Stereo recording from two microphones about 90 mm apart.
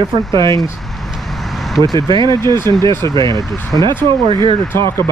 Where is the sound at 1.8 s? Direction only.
55° right (ahead or behind).